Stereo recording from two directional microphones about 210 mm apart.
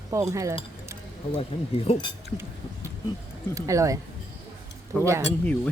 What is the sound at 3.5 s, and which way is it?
Speech, 15° right (ahead or behind).